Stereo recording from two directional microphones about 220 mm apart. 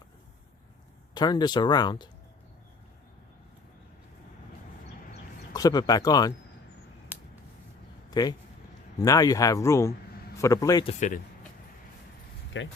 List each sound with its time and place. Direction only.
1.1 s speech: 20° left (ahead or behind)
5.5 s speech: 20° left (ahead or behind)
7.1 s a sound: 5° right (ahead or behind)
8.1 s speech: 15° left (ahead or behind)
12.5 s speech: 55° left (ahead or behind)